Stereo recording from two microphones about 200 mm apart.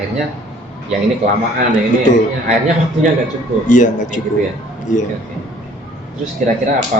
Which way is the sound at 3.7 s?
40° left (ahead or behind).